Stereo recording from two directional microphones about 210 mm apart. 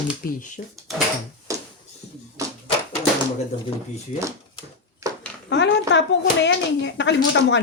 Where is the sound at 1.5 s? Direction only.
15° right (ahead or behind).